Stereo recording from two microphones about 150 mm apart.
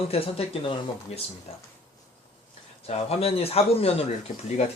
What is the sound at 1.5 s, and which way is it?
Speech, 40° left (ahead or behind).